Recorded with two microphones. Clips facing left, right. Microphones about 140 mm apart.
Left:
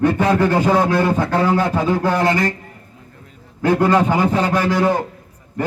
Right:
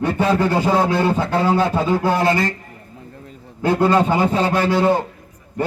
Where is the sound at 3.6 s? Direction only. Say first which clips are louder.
Left 1 dB; 20° right (ahead or behind).